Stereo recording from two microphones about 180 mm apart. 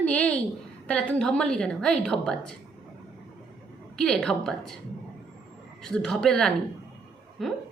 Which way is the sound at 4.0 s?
5° left (ahead or behind).